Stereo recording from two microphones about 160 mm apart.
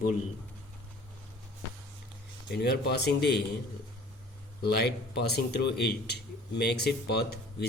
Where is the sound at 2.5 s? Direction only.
90° left.